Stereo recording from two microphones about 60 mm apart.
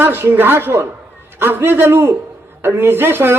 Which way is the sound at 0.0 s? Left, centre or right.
Right.